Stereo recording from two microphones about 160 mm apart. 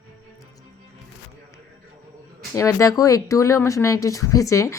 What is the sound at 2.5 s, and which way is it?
Speech, 20° left (ahead or behind).